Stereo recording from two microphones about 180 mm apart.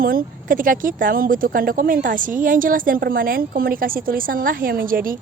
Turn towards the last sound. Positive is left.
turn(degrees=-50)  # may be behind; listen again after turning